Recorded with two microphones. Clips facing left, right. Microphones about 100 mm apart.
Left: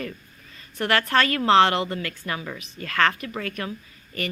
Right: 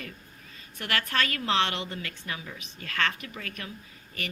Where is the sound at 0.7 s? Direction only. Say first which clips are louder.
Left 8 dB; 40° left (ahead or behind).